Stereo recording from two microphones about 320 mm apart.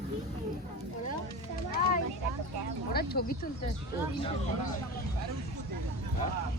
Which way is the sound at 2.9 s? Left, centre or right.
Left.